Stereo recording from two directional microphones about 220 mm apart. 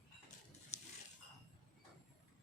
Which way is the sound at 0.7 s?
30° left (ahead or behind).